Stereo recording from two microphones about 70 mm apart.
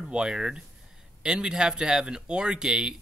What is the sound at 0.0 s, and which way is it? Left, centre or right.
Speech, centre.